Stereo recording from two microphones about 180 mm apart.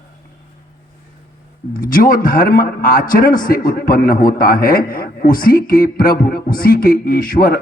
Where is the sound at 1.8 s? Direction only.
50° left (ahead or behind).